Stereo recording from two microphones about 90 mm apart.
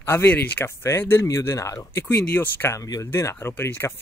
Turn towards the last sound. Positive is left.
turn(degrees=30)  # may be behind; listen again after turning